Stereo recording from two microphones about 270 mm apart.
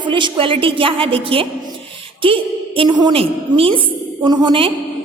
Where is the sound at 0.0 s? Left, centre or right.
Centre.